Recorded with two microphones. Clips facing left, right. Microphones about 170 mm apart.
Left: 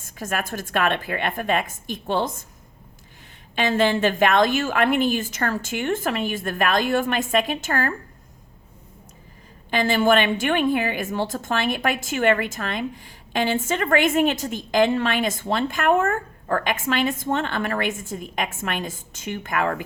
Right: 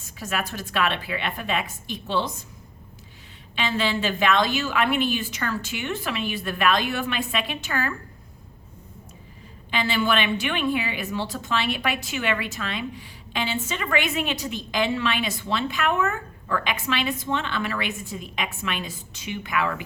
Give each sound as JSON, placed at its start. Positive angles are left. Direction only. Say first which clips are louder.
{"t": 0.0, "sound": "a woman's voice", "louder": "left 2 dB", "side_deg": 50}
{"t": 3.5, "sound": "a woman's voice", "louder": "left 5 dB", "side_deg": 45}
{"t": 9.6, "sound": "a woman's voice", "louder": "left 5 dB", "side_deg": 45}